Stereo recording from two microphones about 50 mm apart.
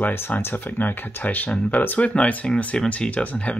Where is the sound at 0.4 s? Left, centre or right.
Left.